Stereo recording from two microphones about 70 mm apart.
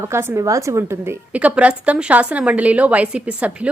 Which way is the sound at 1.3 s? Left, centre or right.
Centre.